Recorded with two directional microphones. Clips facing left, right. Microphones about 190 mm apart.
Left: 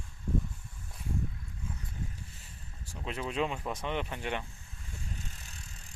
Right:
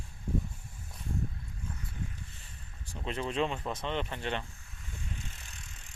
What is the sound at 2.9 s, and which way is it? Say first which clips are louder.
Speech: right 1 dB; 5° left (ahead or behind).